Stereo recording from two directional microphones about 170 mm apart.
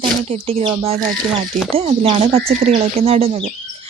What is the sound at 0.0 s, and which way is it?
Speech, 30° right (ahead or behind).